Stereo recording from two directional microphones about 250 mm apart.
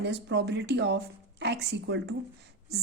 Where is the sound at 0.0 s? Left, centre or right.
Right.